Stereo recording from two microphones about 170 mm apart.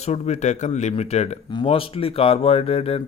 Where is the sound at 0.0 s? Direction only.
40° left (ahead or behind).